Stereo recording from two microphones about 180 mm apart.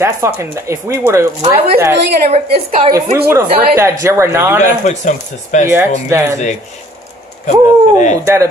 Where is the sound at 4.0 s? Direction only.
15° right (ahead or behind).